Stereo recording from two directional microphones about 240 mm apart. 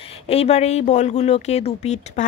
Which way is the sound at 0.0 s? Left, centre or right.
Left.